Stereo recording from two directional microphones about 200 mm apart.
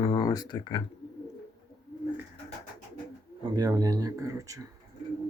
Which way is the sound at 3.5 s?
20° right (ahead or behind).